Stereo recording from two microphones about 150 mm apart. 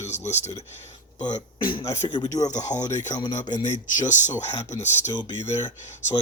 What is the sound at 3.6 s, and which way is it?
Speech, 55° left (ahead or behind).